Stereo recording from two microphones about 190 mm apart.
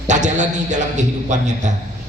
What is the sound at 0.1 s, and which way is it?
A man's voice, 40° right (ahead or behind).